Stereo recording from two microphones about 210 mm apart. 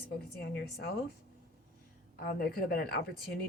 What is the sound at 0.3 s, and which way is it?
Speech, 50° left (ahead or behind).